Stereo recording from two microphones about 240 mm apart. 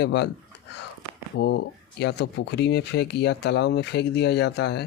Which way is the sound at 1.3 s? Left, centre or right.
Left.